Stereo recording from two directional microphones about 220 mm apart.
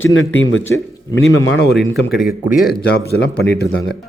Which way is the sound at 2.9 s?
45° left (ahead or behind).